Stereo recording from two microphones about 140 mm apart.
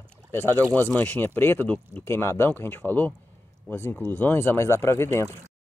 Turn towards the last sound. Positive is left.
turn(degrees=15)  # may be behind; listen again after turning